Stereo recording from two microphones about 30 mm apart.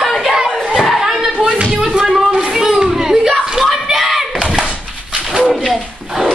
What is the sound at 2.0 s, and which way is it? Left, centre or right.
Music, centre.